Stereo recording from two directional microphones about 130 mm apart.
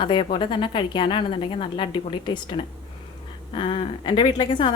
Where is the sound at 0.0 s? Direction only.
40° left (ahead or behind).